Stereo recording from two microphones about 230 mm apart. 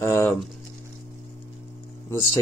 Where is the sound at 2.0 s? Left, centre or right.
Centre.